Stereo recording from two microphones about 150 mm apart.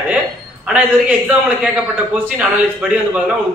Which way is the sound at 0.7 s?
10° right (ahead or behind).